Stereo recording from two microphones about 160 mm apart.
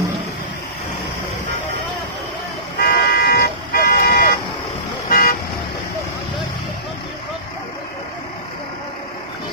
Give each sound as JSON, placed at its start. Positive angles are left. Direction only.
{"t": 2.8, "sound": "vehicle", "side_deg": 75}
{"t": 5.1, "sound": "car", "side_deg": 65}